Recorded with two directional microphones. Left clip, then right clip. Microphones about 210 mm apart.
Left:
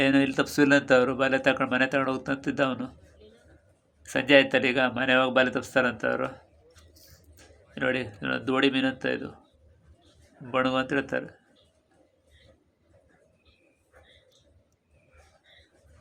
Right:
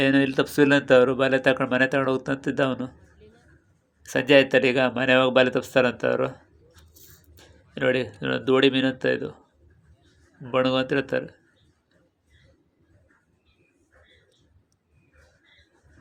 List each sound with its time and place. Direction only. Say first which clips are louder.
0.0 s speech: right 2 dB; 10° right (ahead or behind)
4.0 s speech: right 2 dB; 15° right (ahead or behind)
7.3 s speech: right 3 dB; 15° right (ahead or behind)
10.5 s speech: right 3 dB; 15° right (ahead or behind)